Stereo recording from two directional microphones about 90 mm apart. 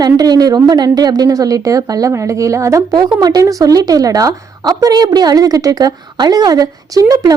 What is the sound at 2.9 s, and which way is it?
A woman's voice, 50° right (ahead or behind).